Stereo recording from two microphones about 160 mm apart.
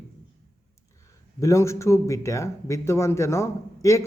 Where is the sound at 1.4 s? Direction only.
20° left (ahead or behind).